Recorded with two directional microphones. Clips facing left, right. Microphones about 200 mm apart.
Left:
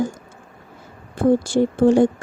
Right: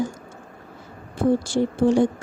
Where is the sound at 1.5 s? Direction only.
55° left (ahead or behind).